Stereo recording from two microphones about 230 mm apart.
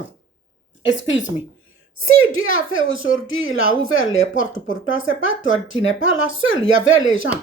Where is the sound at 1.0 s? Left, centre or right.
Left.